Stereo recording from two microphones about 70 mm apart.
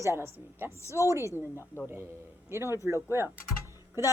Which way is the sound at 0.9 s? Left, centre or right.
Left.